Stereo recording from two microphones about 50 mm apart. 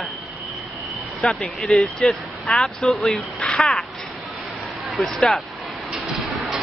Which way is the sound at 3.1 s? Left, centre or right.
Centre.